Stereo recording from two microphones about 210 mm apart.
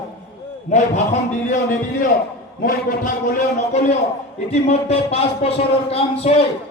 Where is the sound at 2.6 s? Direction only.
40° left (ahead or behind).